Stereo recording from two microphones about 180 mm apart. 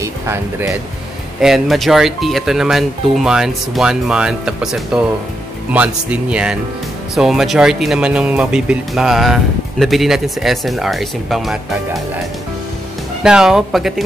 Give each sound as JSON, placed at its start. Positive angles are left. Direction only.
{"t": 0.0, "sound": "speech", "side_deg": -15}
{"t": 1.4, "sound": "speech", "side_deg": 0}
{"t": 13.2, "sound": "speech", "side_deg": -5}